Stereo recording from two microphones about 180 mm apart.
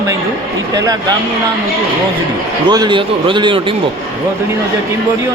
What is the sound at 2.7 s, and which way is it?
Speech, 25° right (ahead or behind).